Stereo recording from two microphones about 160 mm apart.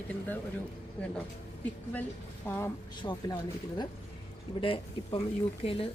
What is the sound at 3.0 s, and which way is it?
Speech, 30° left (ahead or behind).